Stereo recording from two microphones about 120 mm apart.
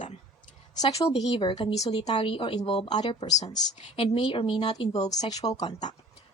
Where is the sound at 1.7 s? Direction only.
65° left (ahead or behind).